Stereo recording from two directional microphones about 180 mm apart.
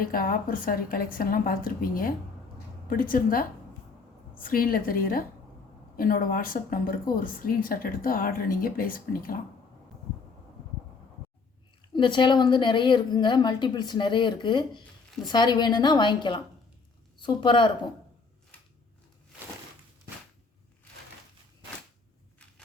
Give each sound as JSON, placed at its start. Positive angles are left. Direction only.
{"t": 0.0, "sound": "speech", "side_deg": 55}
{"t": 11.9, "sound": "a woman's voice", "side_deg": 25}